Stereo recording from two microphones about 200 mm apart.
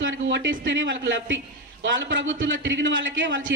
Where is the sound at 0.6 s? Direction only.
65° right (ahead or behind).